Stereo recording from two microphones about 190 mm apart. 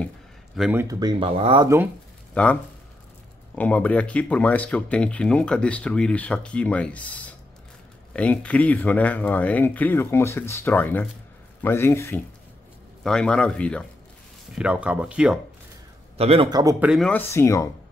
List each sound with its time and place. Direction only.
0.6 s speech: 5° right (ahead or behind)
0.8 s speech: 20° right (ahead or behind)
2.3 s speech: 5° left (ahead or behind)
14.5 s speech: 5° right (ahead or behind)
16.2 s speech: 30° right (ahead or behind)
16.8 s speech: 5° right (ahead or behind)
17.1 s speech: 15° left (ahead or behind)